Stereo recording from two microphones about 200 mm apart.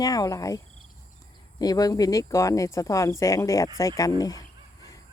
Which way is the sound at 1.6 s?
20° left (ahead or behind).